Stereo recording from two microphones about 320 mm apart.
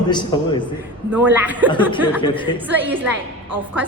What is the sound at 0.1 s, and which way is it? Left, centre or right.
Speech, centre.